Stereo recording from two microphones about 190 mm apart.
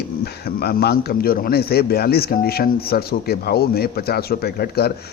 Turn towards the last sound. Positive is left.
turn(degrees=55)  # may be behind; listen again after turning